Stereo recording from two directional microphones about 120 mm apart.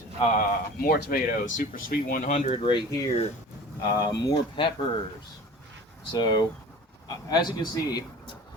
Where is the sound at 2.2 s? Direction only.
80° left.